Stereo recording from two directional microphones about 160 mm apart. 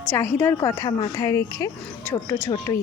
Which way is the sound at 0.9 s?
30° left (ahead or behind).